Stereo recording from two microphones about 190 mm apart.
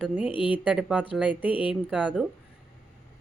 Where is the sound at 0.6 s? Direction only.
5° right (ahead or behind).